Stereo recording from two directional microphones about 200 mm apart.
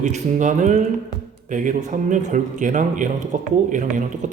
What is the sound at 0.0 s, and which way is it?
A man's voice, 35° right (ahead or behind).